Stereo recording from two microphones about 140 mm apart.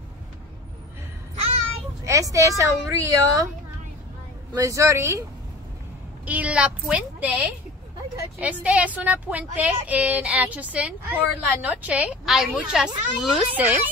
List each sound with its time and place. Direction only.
2.0 s a woman's voice: 20° right (ahead or behind)
4.6 s a woman's voice: 20° right (ahead or behind)
6.2 s a woman's voice: 10° right (ahead or behind)